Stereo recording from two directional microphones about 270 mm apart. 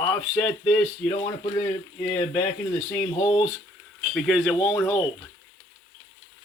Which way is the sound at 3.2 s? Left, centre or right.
Centre.